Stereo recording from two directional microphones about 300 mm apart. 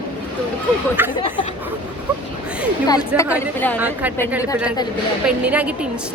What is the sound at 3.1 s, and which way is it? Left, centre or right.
Speech, centre.